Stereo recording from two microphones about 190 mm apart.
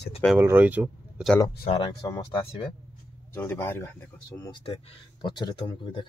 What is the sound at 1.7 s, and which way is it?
Speech, 25° left (ahead or behind).